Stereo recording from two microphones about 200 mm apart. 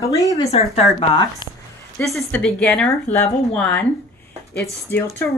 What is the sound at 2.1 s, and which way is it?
A woman's voice, 10° left (ahead or behind).